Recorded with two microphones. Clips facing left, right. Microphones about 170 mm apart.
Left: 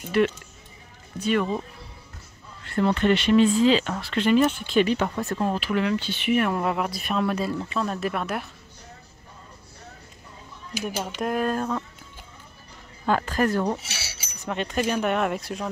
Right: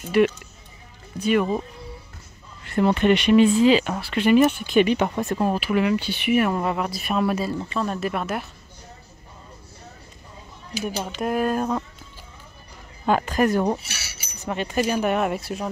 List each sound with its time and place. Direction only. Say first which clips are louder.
0.2 s speech: right 3 dB; 10° right (ahead or behind)
2.6 s speech: right 3 dB; 15° right (ahead or behind)
11.1 s speech: right 3 dB; 5° right (ahead or behind)
13.0 s speech: right 3 dB; 15° right (ahead or behind)
14.4 s speech: right 2 dB; 5° right (ahead or behind)